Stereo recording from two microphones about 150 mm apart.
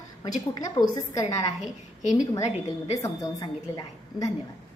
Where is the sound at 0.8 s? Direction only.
40° left (ahead or behind).